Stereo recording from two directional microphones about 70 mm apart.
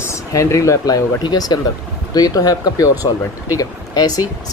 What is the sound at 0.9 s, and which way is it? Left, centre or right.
Speech, left.